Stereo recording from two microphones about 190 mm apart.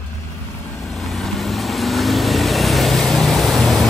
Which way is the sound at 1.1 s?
Centre (ahead or behind).